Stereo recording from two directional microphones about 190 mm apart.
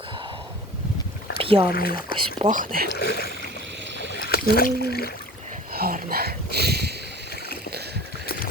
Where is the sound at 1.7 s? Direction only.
50° left (ahead or behind).